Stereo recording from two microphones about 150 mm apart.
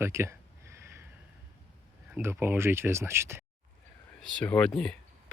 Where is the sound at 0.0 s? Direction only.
20° right (ahead or behind).